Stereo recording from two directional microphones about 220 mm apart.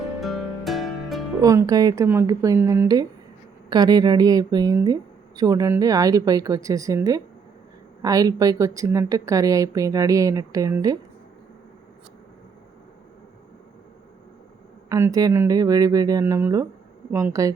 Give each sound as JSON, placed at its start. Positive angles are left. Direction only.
{"t": 0.2, "sound": "music", "side_deg": 0}
{"t": 1.4, "sound": "a woman's voice", "side_deg": -15}
{"t": 14.8, "sound": "a woman's voice", "side_deg": -15}